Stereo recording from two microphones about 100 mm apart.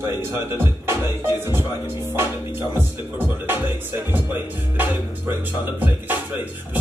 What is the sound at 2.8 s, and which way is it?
Speech, 20° right (ahead or behind).